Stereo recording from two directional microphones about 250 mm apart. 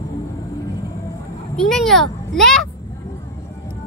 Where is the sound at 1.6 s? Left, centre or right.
Centre.